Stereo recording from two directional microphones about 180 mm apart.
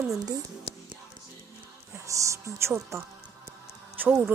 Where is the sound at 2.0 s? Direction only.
15° right (ahead or behind).